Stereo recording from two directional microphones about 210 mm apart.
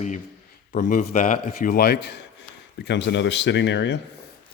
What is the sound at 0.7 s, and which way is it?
A man's voice, 40° left (ahead or behind).